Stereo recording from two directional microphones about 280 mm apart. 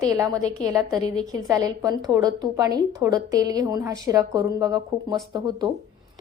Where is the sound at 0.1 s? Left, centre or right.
Centre.